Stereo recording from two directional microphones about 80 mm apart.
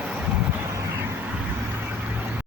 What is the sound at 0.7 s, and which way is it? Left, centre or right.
Vehicle, right.